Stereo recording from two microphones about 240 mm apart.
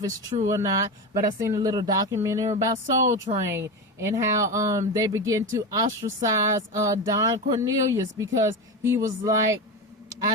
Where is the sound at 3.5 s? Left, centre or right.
Centre.